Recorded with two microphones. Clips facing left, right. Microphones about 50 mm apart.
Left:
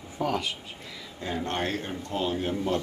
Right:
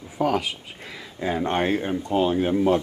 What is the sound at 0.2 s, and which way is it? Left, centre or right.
Speech, centre.